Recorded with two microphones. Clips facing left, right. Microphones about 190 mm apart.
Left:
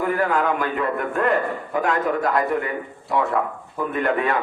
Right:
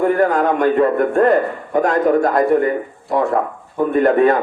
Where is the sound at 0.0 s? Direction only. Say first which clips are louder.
Right 6 dB; 40° right (ahead or behind).